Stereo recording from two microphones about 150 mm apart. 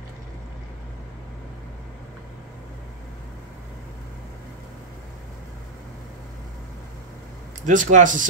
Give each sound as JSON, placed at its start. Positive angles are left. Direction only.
{"t": 7.6, "sound": "speech", "side_deg": -55}